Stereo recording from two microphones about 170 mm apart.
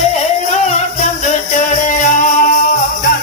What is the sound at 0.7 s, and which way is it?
Music, 45° left (ahead or behind).